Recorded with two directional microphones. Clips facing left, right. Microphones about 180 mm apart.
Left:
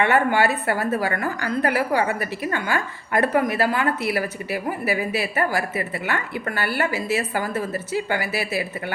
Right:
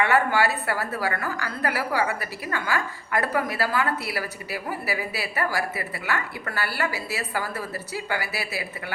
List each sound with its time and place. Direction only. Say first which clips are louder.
0.0 s a woman's voice: left 3 dB; 20° left (ahead or behind)